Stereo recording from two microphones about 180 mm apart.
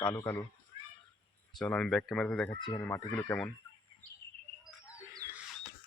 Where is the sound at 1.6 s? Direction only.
5° left (ahead or behind).